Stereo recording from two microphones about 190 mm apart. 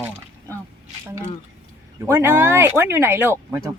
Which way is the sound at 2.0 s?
15° right (ahead or behind).